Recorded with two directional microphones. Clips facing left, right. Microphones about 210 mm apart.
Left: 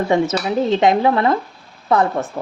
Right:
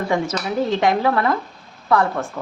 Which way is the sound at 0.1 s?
20° left (ahead or behind).